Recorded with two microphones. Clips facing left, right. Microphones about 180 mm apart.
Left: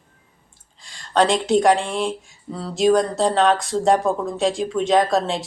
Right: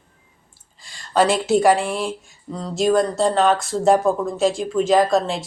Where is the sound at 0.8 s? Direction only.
5° right (ahead or behind).